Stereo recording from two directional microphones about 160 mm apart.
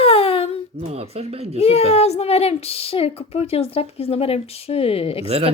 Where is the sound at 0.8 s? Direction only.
40° right (ahead or behind).